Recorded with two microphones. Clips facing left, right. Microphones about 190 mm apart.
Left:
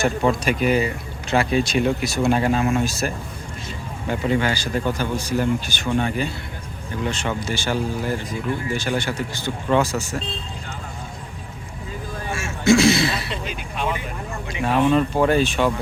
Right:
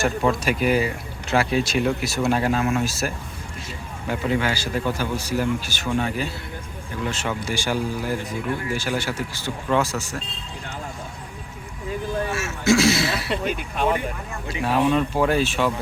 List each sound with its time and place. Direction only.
0.0 s speech: centre (ahead or behind)
4.1 s speech: 5° right (ahead or behind)
12.3 s a sound: 5° right (ahead or behind)
13.3 s speech: 50° right (ahead or behind)
14.6 s speech: 5° right (ahead or behind)